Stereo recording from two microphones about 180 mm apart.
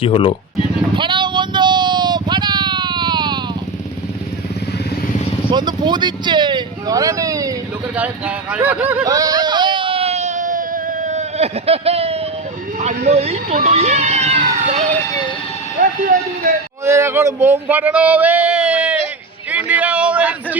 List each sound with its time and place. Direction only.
0.0 s speech: 30° left (ahead or behind)
0.9 s vehicle: 25° right (ahead or behind)
5.5 s speech: 25° right (ahead or behind)
7.9 s speech: 10° right (ahead or behind)
9.0 s a sound: 20° right (ahead or behind)
12.8 s speech: 35° right (ahead or behind)
13.7 s a sound: 35° right (ahead or behind)
16.8 s speech: 15° right (ahead or behind)
19.5 s a sound: 5° right (ahead or behind)